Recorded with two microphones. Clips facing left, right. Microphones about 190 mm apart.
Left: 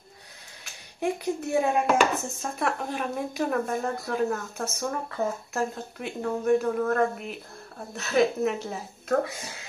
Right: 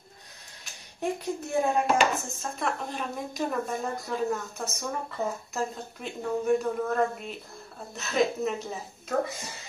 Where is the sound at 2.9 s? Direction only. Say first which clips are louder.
Left 4 dB; 5° left (ahead or behind).